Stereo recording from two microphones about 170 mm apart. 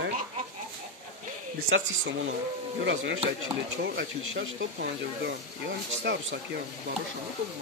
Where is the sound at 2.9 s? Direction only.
90° right.